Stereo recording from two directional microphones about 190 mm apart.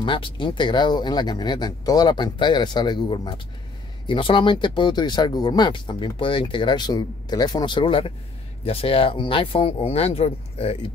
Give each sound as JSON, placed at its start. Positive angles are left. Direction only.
{"t": 0.0, "sound": "speech", "side_deg": 25}